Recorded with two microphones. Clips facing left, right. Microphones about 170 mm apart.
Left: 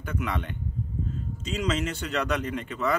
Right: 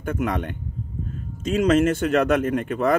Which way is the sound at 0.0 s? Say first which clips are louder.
Right 6 dB; 50° right (ahead or behind).